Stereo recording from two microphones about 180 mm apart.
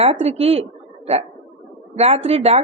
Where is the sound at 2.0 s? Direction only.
35° right (ahead or behind).